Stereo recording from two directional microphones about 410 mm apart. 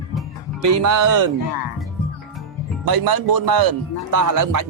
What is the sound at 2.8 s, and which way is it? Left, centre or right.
Speech, right.